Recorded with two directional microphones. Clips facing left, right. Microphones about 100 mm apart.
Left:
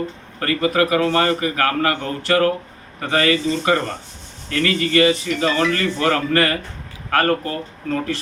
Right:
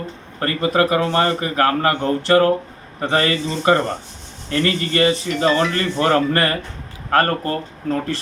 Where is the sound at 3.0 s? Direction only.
30° right (ahead or behind).